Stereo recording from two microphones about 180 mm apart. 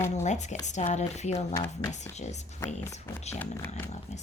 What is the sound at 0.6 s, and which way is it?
Speech, 40° left (ahead or behind).